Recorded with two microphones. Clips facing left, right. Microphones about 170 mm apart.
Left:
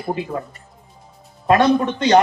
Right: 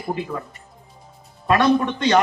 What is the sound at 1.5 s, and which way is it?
Speech, 45° left (ahead or behind).